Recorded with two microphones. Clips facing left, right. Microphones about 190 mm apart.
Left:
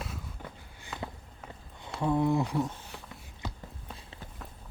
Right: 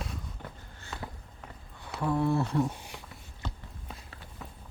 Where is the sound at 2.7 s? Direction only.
15° right (ahead or behind).